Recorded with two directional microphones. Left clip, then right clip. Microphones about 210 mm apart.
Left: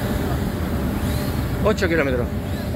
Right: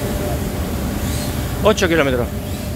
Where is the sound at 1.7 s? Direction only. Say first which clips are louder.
Right 5 dB; 25° right (ahead or behind).